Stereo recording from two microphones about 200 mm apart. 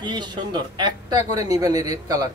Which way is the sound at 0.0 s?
20° right (ahead or behind).